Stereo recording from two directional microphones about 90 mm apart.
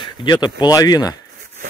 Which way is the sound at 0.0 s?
55° left (ahead or behind).